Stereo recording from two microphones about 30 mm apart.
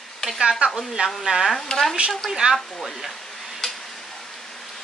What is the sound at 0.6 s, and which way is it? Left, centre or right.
Speech, right.